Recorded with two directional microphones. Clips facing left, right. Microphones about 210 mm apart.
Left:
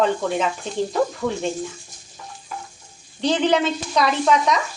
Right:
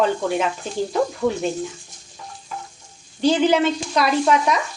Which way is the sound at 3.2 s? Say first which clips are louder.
Right 2 dB; 5° right (ahead or behind).